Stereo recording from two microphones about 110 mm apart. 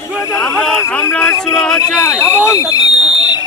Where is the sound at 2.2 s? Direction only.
25° left (ahead or behind).